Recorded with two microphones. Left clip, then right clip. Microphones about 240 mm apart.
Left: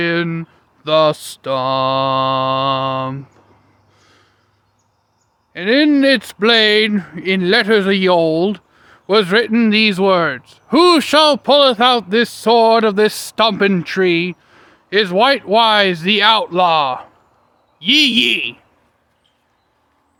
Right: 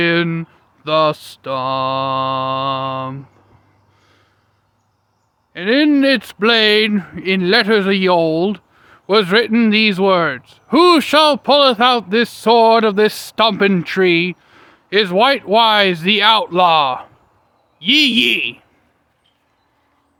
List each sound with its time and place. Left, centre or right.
0.0 s speech: centre
3.9 s a sound: centre
5.5 s speech: centre